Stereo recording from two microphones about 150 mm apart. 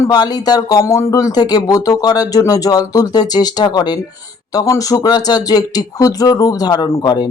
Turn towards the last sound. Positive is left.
turn(degrees=25)  # may be behind; listen again after turning